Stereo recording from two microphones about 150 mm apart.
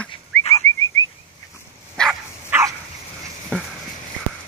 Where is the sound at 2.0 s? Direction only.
5° left (ahead or behind).